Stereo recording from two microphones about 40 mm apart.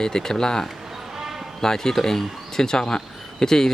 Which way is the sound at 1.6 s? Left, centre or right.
Centre.